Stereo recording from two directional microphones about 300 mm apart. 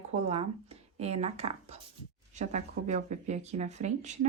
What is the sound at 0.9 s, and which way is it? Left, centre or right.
A woman's voice, right.